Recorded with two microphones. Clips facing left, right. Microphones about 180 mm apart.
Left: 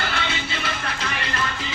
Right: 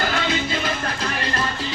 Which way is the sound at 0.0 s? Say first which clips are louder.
Right 5 dB; 40° right (ahead or behind).